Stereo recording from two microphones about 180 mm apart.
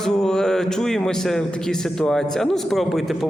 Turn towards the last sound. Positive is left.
turn(degrees=0)  # may be behind; listen again after turning